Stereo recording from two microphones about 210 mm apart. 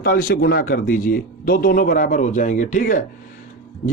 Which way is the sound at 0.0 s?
45° left (ahead or behind).